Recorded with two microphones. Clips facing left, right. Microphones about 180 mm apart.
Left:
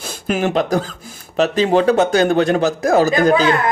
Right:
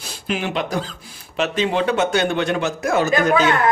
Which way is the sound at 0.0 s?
45° left (ahead or behind).